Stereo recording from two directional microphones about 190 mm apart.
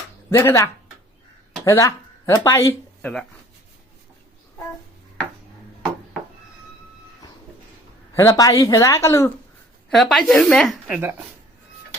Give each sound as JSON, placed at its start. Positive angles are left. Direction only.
{"t": 0.3, "sound": "speech", "side_deg": 15}
{"t": 8.1, "sound": "speech", "side_deg": 15}
{"t": 9.9, "sound": "speech", "side_deg": 0}